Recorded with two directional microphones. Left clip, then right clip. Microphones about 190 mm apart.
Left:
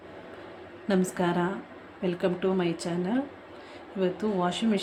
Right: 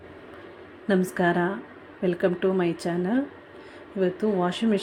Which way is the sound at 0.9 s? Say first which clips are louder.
Right 4 dB; 15° right (ahead or behind).